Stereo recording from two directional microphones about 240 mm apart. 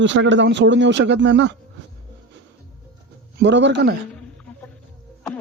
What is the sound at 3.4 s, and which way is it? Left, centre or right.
Speech, right.